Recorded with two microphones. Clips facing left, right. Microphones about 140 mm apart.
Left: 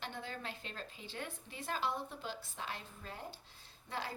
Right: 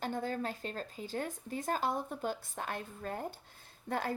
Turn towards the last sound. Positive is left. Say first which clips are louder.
# right 8 dB
turn(degrees=-50)  # may be behind; listen again after turning